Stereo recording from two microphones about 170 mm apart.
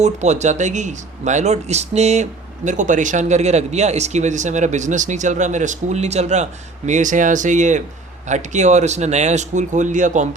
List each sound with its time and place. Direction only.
0.0 s speech: 40° right (ahead or behind)